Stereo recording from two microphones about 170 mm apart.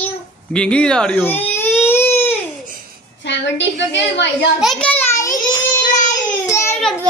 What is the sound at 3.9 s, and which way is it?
Speech, 90° left.